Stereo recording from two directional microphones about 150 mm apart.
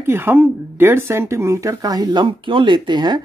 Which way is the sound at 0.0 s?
15° right (ahead or behind).